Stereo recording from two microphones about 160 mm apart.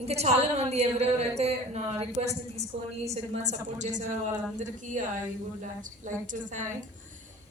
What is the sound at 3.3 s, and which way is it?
Singing, 45° right (ahead or behind).